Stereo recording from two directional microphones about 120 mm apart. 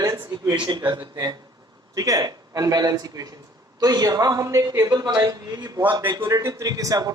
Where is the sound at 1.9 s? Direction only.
30° right (ahead or behind).